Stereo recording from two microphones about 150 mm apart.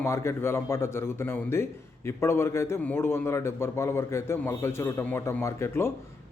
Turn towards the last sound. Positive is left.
turn(degrees=15)  # may be behind; listen again after turning